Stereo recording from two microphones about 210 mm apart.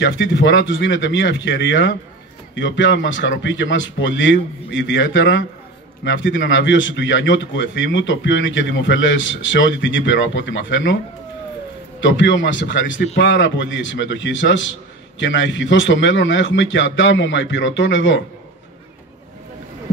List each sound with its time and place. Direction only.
0.0 s a man's voice: 60° left (ahead or behind)
12.0 s a man's voice: 60° left (ahead or behind)